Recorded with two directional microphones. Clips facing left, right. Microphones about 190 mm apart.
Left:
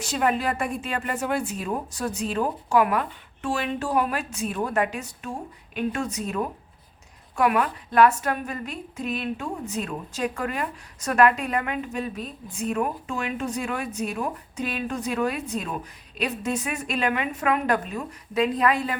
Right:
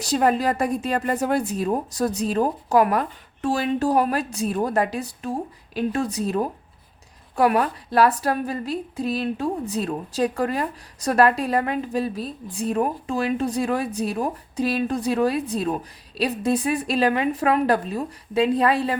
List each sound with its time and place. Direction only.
0.0 s a woman's voice: 35° right (ahead or behind)